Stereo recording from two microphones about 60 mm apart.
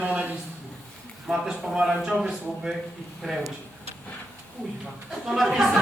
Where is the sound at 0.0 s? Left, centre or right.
Right.